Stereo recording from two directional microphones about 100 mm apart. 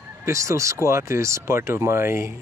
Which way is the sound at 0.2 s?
30° right (ahead or behind).